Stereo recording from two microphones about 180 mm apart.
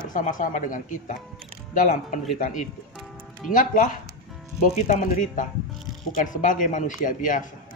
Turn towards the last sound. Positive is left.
turn(degrees=45)  # may be behind; listen again after turning